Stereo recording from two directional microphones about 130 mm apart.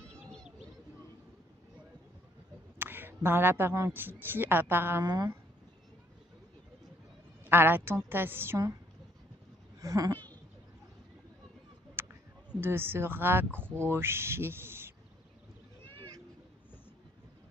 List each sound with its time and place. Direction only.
0.0 s bird: 5° left (ahead or behind)
2.8 s speech: 15° right (ahead or behind)
5.0 s speech: 30° right (ahead or behind)
7.4 s speech: 15° right (ahead or behind)
9.8 s speech: 25° right (ahead or behind)
11.9 s speech: 15° right (ahead or behind)